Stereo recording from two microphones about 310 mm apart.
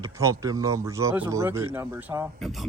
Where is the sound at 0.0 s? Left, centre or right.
Centre.